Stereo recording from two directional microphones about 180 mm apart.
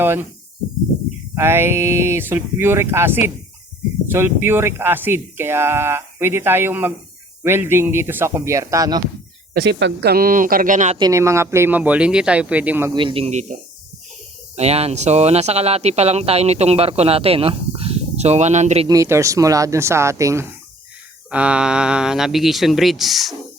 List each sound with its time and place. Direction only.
0.0 s speech: 10° right (ahead or behind)
1.4 s speech: 15° right (ahead or behind)
9.6 s speech: 75° right (ahead or behind); by 10.9 s 45° right (ahead or behind)
10.9 s speech: 20° right (ahead or behind)
12.9 s speech: 25° right (ahead or behind)
18.9 s speech: 15° right (ahead or behind)
21.2 s speech: 5° right (ahead or behind)